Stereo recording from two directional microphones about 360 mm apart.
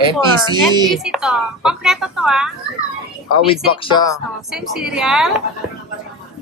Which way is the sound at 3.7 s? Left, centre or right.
Centre.